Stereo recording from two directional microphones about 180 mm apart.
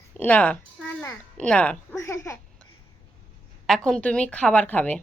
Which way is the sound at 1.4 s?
5° left (ahead or behind).